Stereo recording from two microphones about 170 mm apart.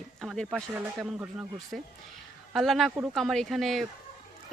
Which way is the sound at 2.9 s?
15° right (ahead or behind).